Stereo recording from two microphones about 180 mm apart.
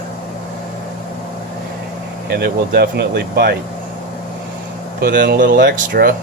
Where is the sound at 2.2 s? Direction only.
60° right (ahead or behind).